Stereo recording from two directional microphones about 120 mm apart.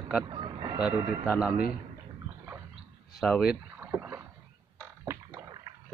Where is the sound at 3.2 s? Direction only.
Centre (ahead or behind).